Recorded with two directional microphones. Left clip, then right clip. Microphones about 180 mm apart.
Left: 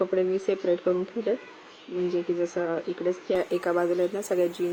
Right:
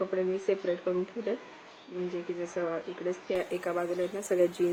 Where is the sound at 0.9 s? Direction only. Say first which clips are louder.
Left 5 dB; centre (ahead or behind).